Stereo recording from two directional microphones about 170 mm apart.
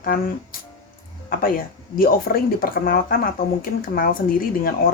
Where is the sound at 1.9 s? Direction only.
60° left (ahead or behind).